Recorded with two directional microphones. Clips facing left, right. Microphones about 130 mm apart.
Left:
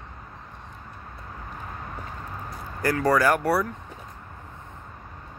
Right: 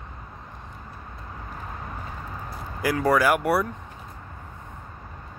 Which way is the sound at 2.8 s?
10° right (ahead or behind).